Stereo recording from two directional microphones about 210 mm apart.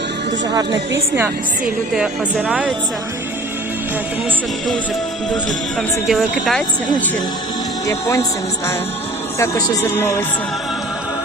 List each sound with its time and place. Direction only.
0.5 s a woman's voice: 15° right (ahead or behind)
6.1 s speech: centre (ahead or behind)
7.9 s speech: 15° left (ahead or behind)
9.4 s speech: 15° left (ahead or behind)